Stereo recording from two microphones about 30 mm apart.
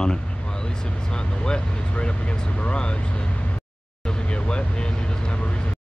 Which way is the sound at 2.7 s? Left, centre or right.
Left.